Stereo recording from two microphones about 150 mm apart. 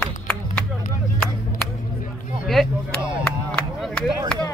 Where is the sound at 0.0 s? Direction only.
10° left (ahead or behind).